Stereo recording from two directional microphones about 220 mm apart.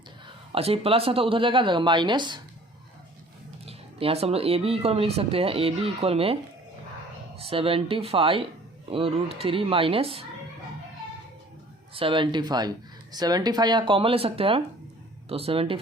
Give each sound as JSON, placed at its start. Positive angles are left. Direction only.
{"t": 0.5, "sound": "speech", "side_deg": -25}
{"t": 3.7, "sound": "speech", "side_deg": -25}
{"t": 7.3, "sound": "speech", "side_deg": -25}
{"t": 11.9, "sound": "speech", "side_deg": -25}